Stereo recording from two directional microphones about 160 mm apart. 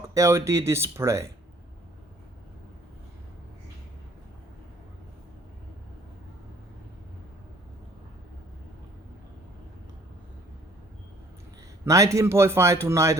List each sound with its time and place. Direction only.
0.1 s a man's voice: 20° right (ahead or behind)
11.9 s a man's voice: 20° right (ahead or behind)